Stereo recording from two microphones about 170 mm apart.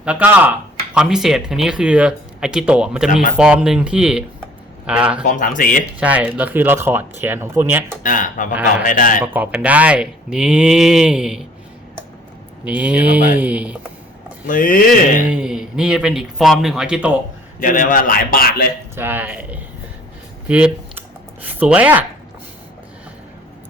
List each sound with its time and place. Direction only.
0.0 s speech: 5° right (ahead or behind)
5.2 s a sound: 50° left (ahead or behind)
6.0 s speech: 10° right (ahead or behind)
8.0 s a sound: 50° left (ahead or behind)
9.2 s speech: 10° right (ahead or behind)
12.6 s speech: 10° right (ahead or behind)
14.4 s a sound: 55° left (ahead or behind)
15.3 s speech: 5° right (ahead or behind)
17.6 s a man's voice: 50° left (ahead or behind)
18.9 s speech: 10° right (ahead or behind)